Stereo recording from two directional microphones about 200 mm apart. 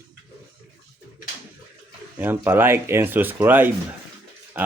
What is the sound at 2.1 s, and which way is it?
Speech, 10° right (ahead or behind).